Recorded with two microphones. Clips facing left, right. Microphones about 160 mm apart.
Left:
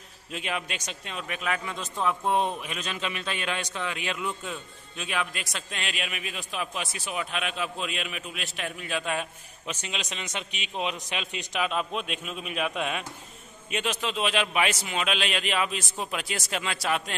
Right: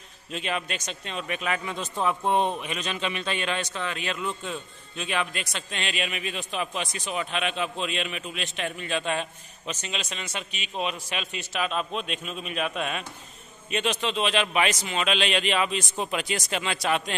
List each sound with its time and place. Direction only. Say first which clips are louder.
0.3 s a man's voice: right 2 dB; 10° left (ahead or behind)